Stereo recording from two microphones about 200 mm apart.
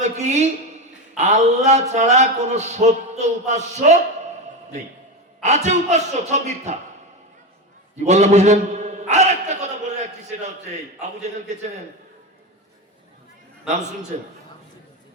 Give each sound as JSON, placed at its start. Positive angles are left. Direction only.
{"t": 0.0, "sound": "a woman's voice", "side_deg": -35}
{"t": 5.4, "sound": "speech", "side_deg": -35}
{"t": 8.0, "sound": "a man's voice", "side_deg": -35}
{"t": 11.0, "sound": "speech", "side_deg": -35}
{"t": 14.1, "sound": "speech", "side_deg": -40}